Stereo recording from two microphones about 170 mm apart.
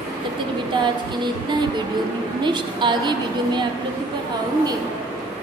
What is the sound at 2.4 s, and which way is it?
Speech, 25° right (ahead or behind).